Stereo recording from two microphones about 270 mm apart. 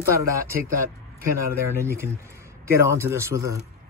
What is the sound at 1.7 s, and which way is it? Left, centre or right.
Speech, centre.